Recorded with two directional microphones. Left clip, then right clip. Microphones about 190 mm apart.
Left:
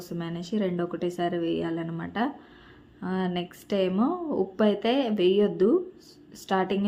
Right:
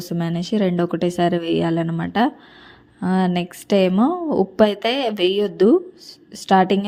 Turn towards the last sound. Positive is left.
turn(degrees=-40)  # may be behind; listen again after turning